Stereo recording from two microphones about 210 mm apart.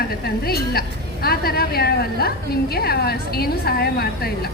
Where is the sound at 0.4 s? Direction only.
45° left (ahead or behind).